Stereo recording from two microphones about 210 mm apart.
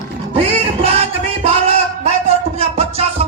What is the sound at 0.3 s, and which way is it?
Music, 30° right (ahead or behind).